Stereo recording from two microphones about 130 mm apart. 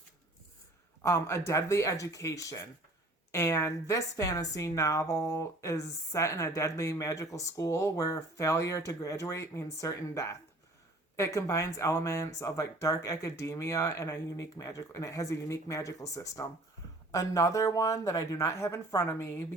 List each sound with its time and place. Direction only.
1.0 s a woman's voice: 20° left (ahead or behind)